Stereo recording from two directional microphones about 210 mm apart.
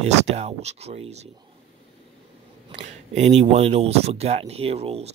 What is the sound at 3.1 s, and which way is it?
Speech, 30° right (ahead or behind).